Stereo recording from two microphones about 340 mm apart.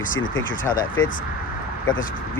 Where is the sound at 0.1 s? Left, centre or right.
Left.